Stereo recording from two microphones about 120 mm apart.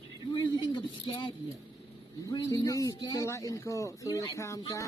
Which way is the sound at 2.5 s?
25° left (ahead or behind).